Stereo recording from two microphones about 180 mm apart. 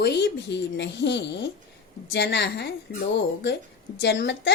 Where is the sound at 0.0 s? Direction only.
65° left (ahead or behind).